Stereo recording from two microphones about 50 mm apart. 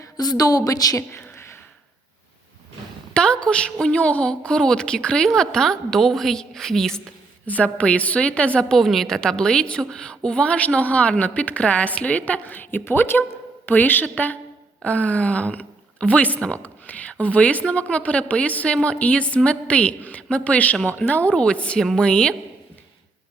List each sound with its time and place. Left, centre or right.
0.7 s a woman's voice: left
3.2 s a woman's voice: centre
7.6 s speech: left
8.8 s a woman's voice: centre; by 21.3 s left
21.3 s speech: left